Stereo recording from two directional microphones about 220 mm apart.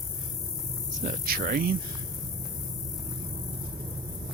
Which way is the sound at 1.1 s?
40° right (ahead or behind).